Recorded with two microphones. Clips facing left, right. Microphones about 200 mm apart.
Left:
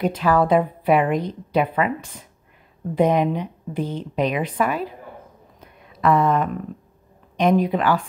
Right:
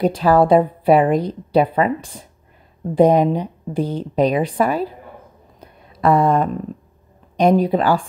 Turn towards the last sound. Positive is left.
turn(degrees=-30)  # may be behind; listen again after turning